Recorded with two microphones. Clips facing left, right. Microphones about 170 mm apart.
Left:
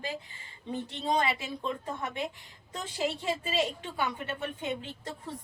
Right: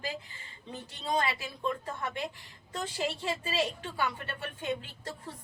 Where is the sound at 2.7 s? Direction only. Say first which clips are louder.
Left 1 dB; 20° left (ahead or behind).